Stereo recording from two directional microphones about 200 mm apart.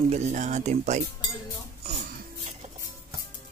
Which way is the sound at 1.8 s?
35° right (ahead or behind).